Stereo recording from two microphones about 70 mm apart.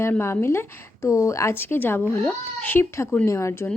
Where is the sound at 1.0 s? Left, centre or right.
Left.